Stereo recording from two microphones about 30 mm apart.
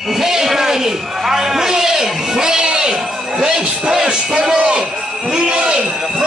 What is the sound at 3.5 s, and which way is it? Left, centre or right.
A man's voice, right.